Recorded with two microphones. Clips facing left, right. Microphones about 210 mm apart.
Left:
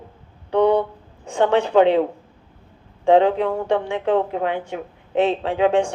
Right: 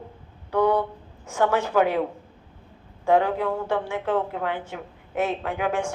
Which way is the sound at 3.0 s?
25° left (ahead or behind).